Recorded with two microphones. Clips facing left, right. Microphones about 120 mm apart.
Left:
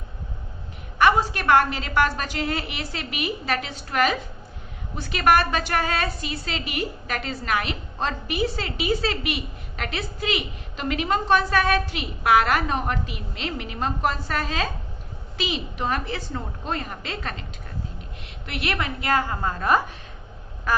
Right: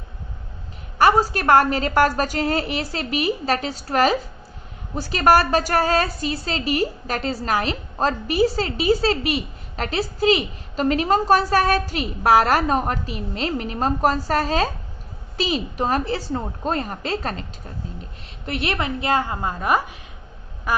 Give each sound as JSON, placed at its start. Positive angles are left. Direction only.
{"t": 0.9, "sound": "a woman's voice", "side_deg": -35}
{"t": 18.4, "sound": "a woman's voice", "side_deg": -30}
{"t": 20.7, "sound": "quack", "side_deg": -15}